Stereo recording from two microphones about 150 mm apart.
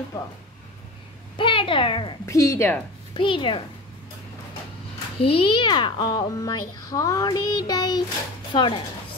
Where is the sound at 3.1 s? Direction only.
35° left (ahead or behind).